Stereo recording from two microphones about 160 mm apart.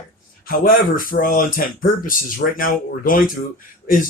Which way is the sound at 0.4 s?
65° left (ahead or behind).